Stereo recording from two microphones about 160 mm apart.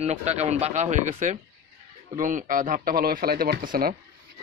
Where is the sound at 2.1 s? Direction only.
55° right (ahead or behind).